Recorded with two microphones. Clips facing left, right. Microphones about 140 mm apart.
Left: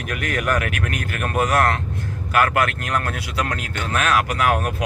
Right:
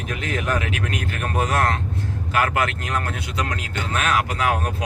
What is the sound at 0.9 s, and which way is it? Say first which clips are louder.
Speech: left 1 dB; 25° right (ahead or behind).